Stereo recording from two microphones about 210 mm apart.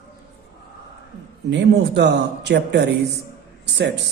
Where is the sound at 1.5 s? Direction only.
55° right (ahead or behind).